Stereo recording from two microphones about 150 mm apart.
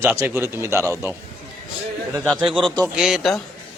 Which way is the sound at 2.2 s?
Centre (ahead or behind).